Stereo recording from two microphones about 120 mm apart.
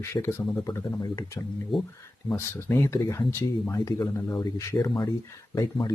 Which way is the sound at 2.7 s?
20° left (ahead or behind).